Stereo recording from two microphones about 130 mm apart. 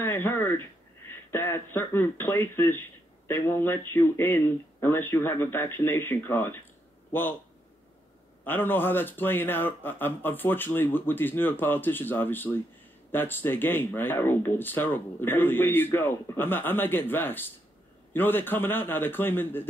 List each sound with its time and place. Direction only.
0.0 s speech: 15° left (ahead or behind)
8.5 s speech: 15° left (ahead or behind)